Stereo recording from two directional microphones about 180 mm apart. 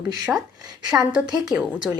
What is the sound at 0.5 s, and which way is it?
Speech, 20° right (ahead or behind).